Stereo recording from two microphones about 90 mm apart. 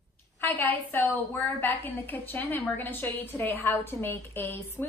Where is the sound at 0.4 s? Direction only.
20° left (ahead or behind).